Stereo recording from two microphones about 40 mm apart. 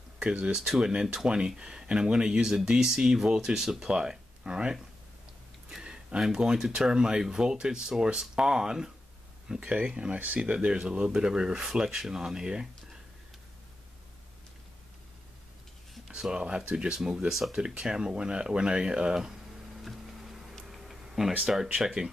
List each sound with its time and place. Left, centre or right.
0.2 s speech: right
0.6 s speech: centre
2.4 s speech: centre
3.9 s speech: right
5.8 s speech: right
10.1 s speech: right
10.5 s speech: right
16.1 s a sound: centre
16.4 s speech: centre
19.8 s a sound: centre
21.4 s speech: centre